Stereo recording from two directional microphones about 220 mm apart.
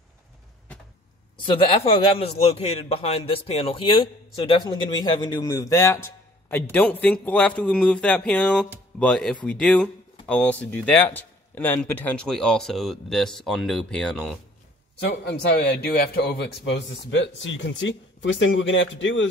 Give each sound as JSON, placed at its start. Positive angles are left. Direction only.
{"t": 1.5, "sound": "a man's voice", "side_deg": 25}
{"t": 15.0, "sound": "a man's voice", "side_deg": 50}